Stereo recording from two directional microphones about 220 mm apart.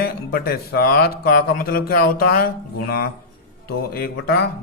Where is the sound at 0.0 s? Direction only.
45° left (ahead or behind).